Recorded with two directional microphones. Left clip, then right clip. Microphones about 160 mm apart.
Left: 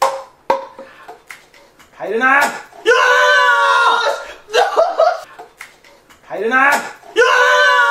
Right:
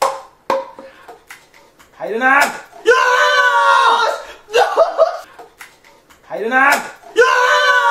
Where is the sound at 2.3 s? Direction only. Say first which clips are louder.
Even; 10° right (ahead or behind).